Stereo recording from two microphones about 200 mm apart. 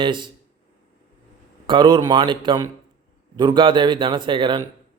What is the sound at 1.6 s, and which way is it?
A man's voice, 25° right (ahead or behind).